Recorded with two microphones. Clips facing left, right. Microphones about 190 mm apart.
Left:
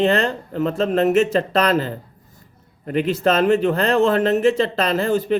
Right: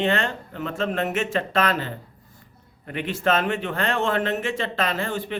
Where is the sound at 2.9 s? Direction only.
40° left (ahead or behind).